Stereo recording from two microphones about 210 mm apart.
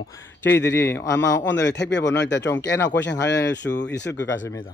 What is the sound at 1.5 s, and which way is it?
Speech, 55° left (ahead or behind).